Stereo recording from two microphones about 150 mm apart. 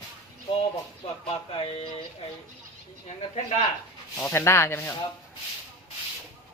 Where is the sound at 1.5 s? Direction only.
35° left (ahead or behind).